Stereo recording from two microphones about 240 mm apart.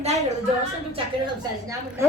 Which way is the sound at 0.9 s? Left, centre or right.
Centre.